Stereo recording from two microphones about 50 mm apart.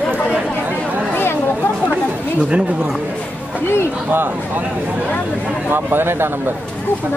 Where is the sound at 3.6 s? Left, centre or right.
Left.